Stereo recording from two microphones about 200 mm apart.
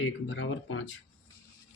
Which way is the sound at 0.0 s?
75° left (ahead or behind).